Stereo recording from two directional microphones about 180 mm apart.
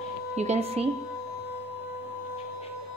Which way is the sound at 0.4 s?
35° right (ahead or behind).